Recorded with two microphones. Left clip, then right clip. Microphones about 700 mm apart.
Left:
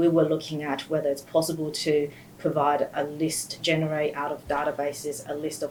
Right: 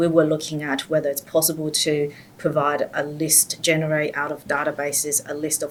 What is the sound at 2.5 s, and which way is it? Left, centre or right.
Speech, centre.